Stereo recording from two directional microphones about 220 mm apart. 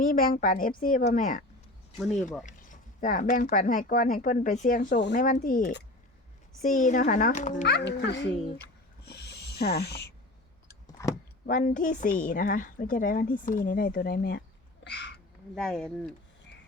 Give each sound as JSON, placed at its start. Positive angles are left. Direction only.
{"t": 0.0, "sound": "speech", "side_deg": 40}
{"t": 7.7, "sound": "a child's voice", "side_deg": 50}
{"t": 9.0, "sound": "a sound", "side_deg": 50}
{"t": 11.0, "sound": "a sound", "side_deg": 15}
{"t": 11.4, "sound": "speech", "side_deg": 35}
{"t": 15.5, "sound": "speech", "side_deg": 0}